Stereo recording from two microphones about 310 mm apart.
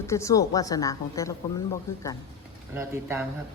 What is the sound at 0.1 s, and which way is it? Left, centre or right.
A woman's voice, centre.